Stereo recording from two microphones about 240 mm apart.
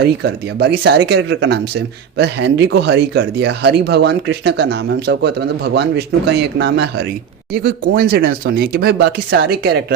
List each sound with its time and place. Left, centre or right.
0.0 s speech: right